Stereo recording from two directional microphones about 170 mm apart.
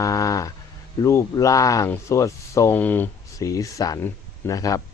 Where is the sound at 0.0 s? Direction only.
20° left (ahead or behind).